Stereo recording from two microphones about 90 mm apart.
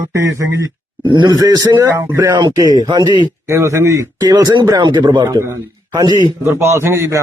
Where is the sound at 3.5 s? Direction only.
30° right (ahead or behind).